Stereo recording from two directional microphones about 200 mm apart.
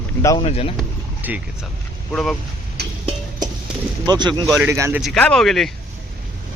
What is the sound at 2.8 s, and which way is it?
Music, 55° right (ahead or behind).